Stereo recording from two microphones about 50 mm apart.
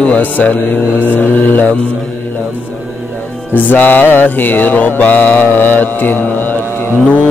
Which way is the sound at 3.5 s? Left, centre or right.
Left.